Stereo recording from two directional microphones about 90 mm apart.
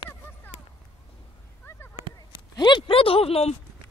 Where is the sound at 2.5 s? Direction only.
60° left (ahead or behind); by 3.4 s 90° left.